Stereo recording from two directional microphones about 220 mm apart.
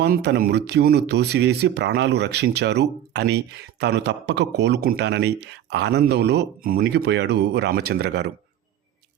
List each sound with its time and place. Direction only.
0.0 s speech: 50° right (ahead or behind)